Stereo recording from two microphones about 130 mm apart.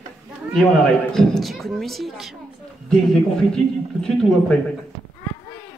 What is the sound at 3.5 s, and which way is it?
A man's voice, 5° left (ahead or behind).